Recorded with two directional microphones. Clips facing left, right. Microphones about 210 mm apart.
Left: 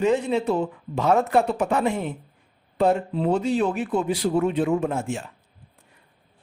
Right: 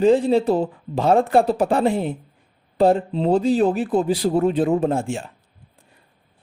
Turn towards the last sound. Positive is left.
turn(degrees=-30)  # may be behind; listen again after turning